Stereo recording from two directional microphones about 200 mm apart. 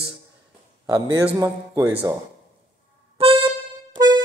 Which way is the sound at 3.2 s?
25° right (ahead or behind).